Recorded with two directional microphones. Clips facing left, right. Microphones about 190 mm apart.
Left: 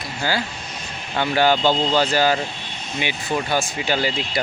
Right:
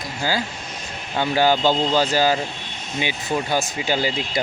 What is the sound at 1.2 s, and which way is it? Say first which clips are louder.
Speech: even; 15° right (ahead or behind).